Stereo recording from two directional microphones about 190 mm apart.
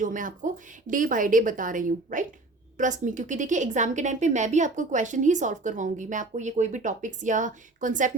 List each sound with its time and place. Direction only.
0.0 s a woman's voice: 45° right (ahead or behind)